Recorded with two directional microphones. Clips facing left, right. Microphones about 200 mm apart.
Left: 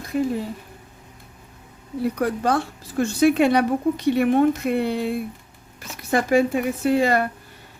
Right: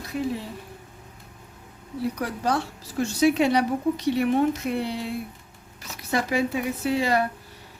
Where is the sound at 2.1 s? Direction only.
55° left (ahead or behind).